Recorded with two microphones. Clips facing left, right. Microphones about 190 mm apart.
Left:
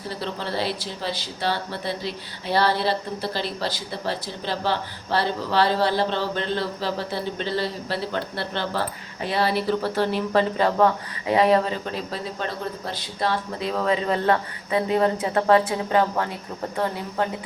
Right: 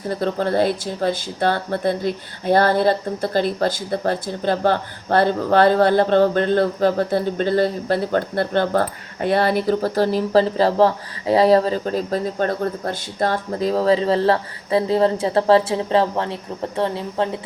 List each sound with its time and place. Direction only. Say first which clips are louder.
0.1 s speech: right 9 dB; 50° right (ahead or behind); by 17.2 s 25° right (ahead or behind)